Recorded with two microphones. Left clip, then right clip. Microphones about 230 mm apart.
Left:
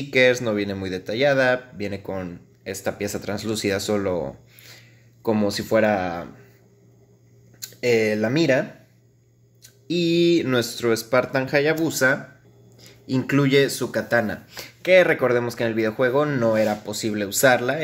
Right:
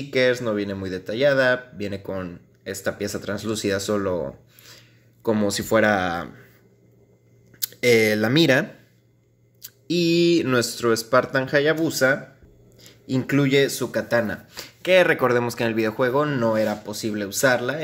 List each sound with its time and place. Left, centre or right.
0.1 s speech: centre
7.6 s speech: right; by 17.7 s centre